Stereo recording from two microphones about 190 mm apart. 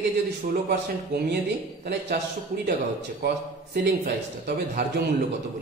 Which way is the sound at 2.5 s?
50° right (ahead or behind).